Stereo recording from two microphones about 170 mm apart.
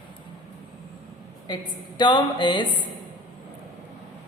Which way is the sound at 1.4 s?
25° left (ahead or behind).